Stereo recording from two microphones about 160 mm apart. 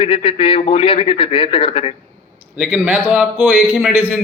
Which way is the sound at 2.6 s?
10° right (ahead or behind).